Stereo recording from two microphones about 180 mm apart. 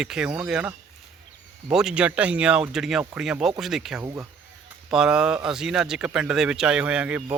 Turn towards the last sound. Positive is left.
turn(degrees=-5)  # may be behind; listen again after turning